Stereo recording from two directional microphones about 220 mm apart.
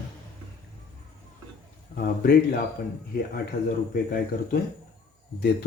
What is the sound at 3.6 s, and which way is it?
A man's voice, 40° left (ahead or behind).